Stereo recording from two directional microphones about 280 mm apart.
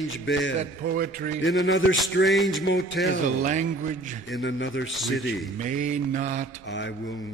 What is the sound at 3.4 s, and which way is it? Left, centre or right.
Mantra, right.